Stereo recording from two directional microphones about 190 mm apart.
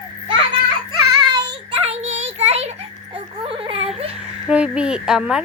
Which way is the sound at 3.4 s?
30° right (ahead or behind).